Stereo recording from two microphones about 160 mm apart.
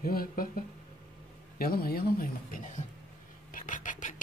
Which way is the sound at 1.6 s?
70° left (ahead or behind).